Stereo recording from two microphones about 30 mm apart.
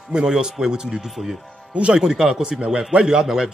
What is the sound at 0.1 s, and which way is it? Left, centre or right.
Speech, right.